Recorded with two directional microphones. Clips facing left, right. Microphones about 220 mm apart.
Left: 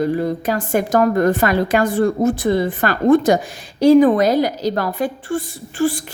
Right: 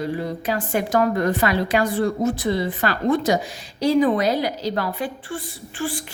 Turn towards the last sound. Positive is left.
turn(degrees=40)  # may be behind; listen again after turning